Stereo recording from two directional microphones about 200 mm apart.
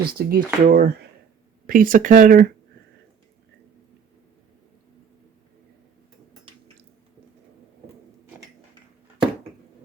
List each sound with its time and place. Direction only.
0.0 s speech: 50° right (ahead or behind)